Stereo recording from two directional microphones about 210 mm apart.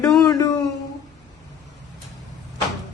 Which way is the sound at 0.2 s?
15° left (ahead or behind).